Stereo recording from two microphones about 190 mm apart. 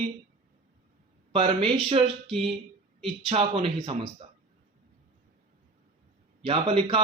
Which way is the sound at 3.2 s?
35° right (ahead or behind).